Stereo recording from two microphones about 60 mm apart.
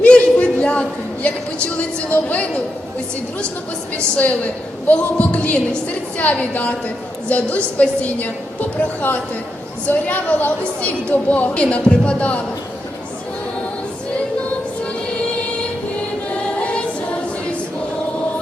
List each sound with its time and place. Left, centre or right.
0.0 s a sound: centre
1.6 s a woman's voice: left
3.9 s a woman's voice: left
16.3 s choir: centre